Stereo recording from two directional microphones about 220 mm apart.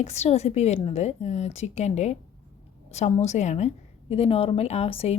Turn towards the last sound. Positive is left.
turn(degrees=30)  # may be behind; listen again after turning